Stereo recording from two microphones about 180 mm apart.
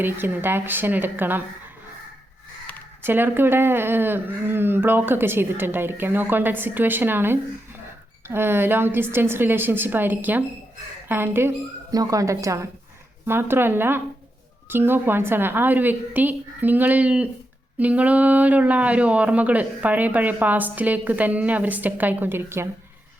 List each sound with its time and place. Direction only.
0.0 s speech: 10° right (ahead or behind)
3.0 s speech: 10° right (ahead or behind)